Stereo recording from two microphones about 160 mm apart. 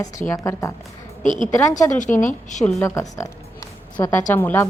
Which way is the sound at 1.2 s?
50° left (ahead or behind).